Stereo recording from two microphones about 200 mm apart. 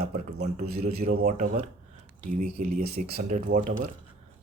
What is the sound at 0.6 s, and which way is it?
Speech, 50° right (ahead or behind).